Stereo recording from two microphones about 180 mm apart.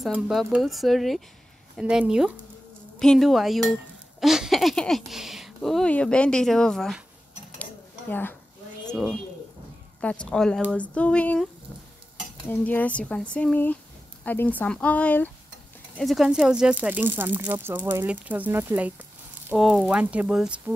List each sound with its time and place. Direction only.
0.0 s speech: centre (ahead or behind)
8.1 s speech: 10° left (ahead or behind)
8.9 s speech: centre (ahead or behind)
12.4 s speech: 10° left (ahead or behind)